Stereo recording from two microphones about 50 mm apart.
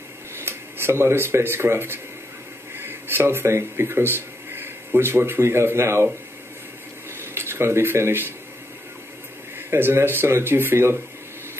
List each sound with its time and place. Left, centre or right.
0.4 s speech: right
7.2 s speech: right
9.7 s speech: right